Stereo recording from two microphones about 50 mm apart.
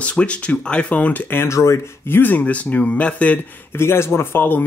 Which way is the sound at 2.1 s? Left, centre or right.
Left.